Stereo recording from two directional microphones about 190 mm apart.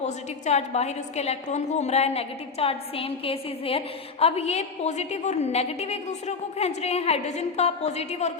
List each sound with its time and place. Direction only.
0.0 s a woman's voice: 35° left (ahead or behind)